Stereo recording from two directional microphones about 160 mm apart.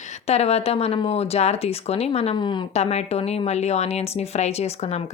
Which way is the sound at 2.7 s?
40° left (ahead or behind).